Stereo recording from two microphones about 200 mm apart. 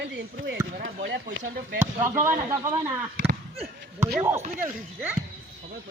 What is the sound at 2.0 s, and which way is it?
Speech, 10° right (ahead or behind).